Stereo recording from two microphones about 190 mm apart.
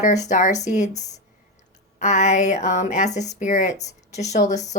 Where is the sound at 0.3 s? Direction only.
40° left (ahead or behind).